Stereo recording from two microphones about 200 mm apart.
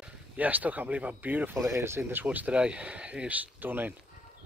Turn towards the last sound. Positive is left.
turn(degrees=-10)  # may be behind; listen again after turning